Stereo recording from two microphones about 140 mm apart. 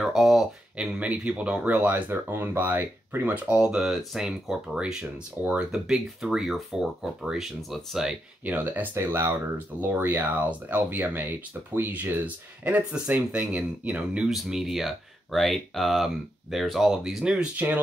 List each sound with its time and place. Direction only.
0.0 s speech: centre (ahead or behind)
8.5 s speech: 15° right (ahead or behind)